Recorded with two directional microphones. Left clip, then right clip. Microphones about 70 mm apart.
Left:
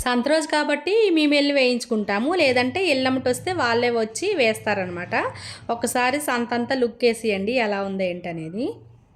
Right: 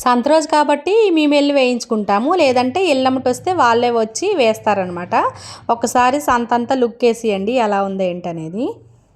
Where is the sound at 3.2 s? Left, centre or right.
Right.